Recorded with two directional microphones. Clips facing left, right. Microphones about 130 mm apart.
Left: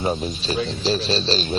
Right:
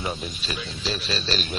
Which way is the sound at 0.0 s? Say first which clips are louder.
Left 7 dB; 35° left (ahead or behind).